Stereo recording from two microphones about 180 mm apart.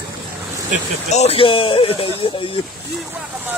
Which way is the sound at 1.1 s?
35° left (ahead or behind).